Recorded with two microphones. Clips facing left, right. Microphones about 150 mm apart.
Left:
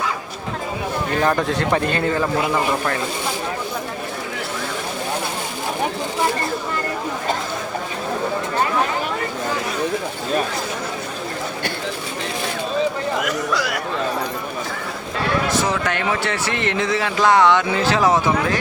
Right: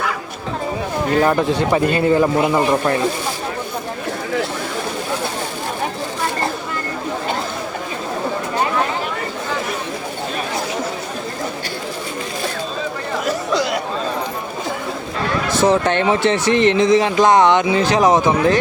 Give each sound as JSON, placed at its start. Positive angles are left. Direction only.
{"t": 1.2, "sound": "speech", "side_deg": -5}
{"t": 2.0, "sound": "speech", "side_deg": -20}
{"t": 13.2, "sound": "chatter", "side_deg": -25}
{"t": 15.5, "sound": "speech", "side_deg": -30}